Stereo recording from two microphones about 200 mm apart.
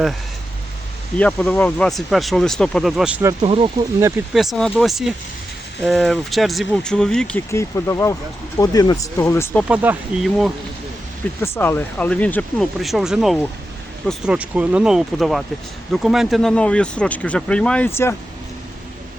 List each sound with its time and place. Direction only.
1.2 s speech: 5° left (ahead or behind)
3.4 s speech: 30° right (ahead or behind)
4.4 s speech: centre (ahead or behind)
9.6 s speech: 10° right (ahead or behind)
11.3 s speech: 10° left (ahead or behind)